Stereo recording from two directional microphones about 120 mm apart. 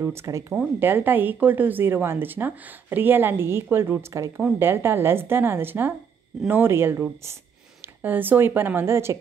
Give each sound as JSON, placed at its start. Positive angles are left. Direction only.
{"t": 0.0, "sound": "a woman's voice", "side_deg": -20}
{"t": 4.4, "sound": "a woman's voice", "side_deg": -15}